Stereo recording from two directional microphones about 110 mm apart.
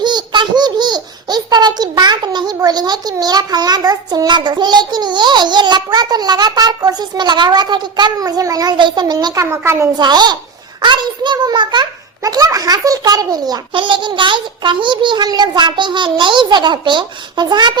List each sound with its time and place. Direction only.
0.0 s a woman's voice: 40° right (ahead or behind); by 9.9 s 25° right (ahead or behind)
10.0 s a woman's voice: 40° right (ahead or behind)